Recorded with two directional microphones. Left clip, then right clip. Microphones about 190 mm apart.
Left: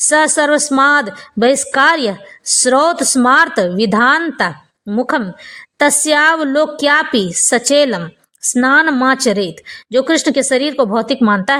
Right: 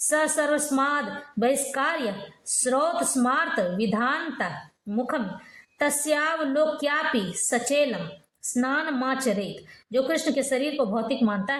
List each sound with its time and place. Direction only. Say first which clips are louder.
0.1 s a woman's voice: left 11 dB; 45° left (ahead or behind)